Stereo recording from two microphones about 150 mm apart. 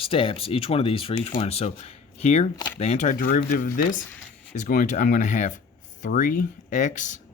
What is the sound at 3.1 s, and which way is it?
Speech, 70° left (ahead or behind).